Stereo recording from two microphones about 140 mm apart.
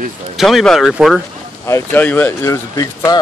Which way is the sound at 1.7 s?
15° left (ahead or behind).